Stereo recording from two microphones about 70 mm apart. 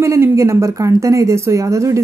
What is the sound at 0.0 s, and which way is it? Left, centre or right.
Speech, right.